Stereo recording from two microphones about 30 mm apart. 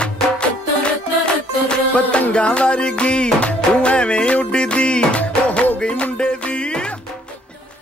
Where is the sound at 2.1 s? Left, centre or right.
Left.